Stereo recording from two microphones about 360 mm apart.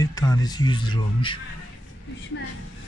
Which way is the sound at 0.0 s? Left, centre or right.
Centre.